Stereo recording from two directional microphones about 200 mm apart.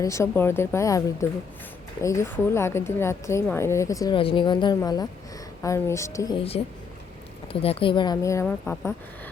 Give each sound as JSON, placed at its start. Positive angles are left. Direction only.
{"t": 0.0, "sound": "a woman's voice", "side_deg": 15}
{"t": 7.4, "sound": "speech", "side_deg": 30}